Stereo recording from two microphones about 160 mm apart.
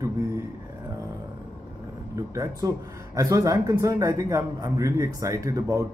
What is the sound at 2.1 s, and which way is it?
A man's voice, 20° right (ahead or behind).